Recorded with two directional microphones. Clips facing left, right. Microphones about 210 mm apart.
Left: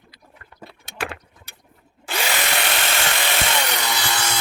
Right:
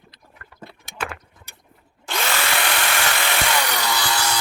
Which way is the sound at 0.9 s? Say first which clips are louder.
Left 1 dB; 25° left (ahead or behind).